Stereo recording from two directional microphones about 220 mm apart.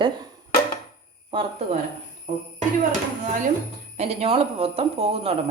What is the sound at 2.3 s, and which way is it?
Music, 35° right (ahead or behind).